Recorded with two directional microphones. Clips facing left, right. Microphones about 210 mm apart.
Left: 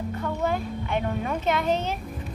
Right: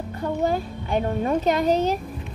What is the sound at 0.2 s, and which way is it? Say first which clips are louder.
A woman's voice: right 5 dB; 35° right (ahead or behind).